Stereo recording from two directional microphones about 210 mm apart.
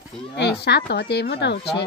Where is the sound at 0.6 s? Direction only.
50° left (ahead or behind).